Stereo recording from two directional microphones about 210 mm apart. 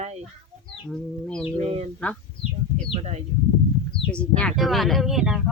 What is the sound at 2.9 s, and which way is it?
Speech, 30° right (ahead or behind).